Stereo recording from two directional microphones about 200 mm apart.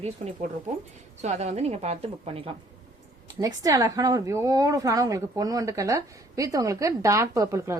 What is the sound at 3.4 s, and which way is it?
A woman's voice, 20° right (ahead or behind).